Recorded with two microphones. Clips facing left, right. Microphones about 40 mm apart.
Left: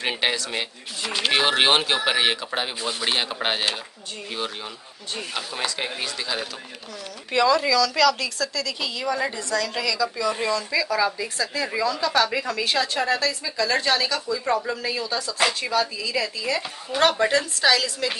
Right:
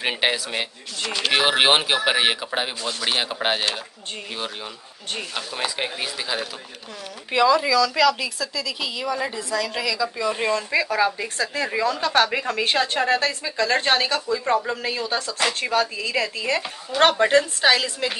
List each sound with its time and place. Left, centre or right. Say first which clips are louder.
0.0 s a woman's voice: right 2 dB; centre
1.0 s speech: even; centre
1.3 s a woman's voice: right 1 dB; centre
2.8 s a man's voice: even; centre
3.1 s speech: right 2 dB; centre
5.3 s a woman's voice: even; centre
10.1 s a woman's voice: right 1 dB; right